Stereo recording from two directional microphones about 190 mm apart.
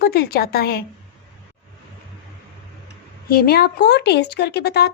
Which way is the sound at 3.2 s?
50° left (ahead or behind).